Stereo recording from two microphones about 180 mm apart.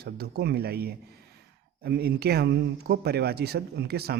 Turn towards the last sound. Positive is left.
turn(degrees=-60)  # may be behind; listen again after turning